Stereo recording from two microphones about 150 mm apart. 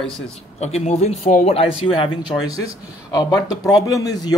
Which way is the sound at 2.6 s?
25° left (ahead or behind).